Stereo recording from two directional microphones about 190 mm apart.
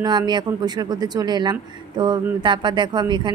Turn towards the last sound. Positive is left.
turn(degrees=-25)  # may be behind; listen again after turning